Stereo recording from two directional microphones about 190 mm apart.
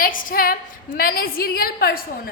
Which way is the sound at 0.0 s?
45° left (ahead or behind).